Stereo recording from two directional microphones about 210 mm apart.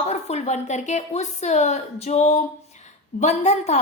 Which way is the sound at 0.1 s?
30° left (ahead or behind).